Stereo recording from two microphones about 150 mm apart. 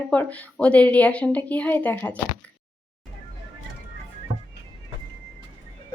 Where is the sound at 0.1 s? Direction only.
10° left (ahead or behind).